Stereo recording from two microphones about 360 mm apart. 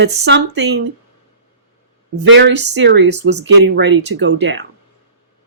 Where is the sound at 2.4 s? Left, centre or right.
Right.